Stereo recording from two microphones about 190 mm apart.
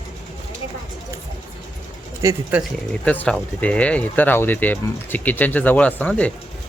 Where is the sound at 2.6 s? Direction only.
5° left (ahead or behind).